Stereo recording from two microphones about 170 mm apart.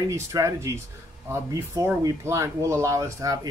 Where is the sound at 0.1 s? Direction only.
20° right (ahead or behind).